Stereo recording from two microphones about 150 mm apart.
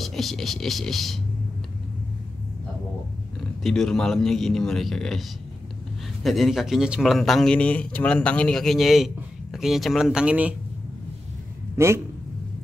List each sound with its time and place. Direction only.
0.0 s speech: centre (ahead or behind)
3.6 s speech: centre (ahead or behind)
6.2 s speech: centre (ahead or behind)
11.7 s a man's voice: 20° right (ahead or behind)